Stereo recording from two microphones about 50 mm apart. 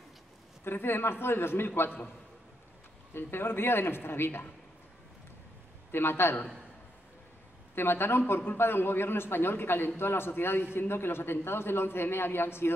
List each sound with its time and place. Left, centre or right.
0.7 s a man's voice: left
3.2 s a man's voice: left
5.9 s a man's voice: left
7.7 s a man's voice: left